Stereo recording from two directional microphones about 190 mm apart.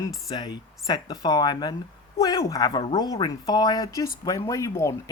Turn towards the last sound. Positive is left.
turn(degrees=15)  # may be behind; listen again after turning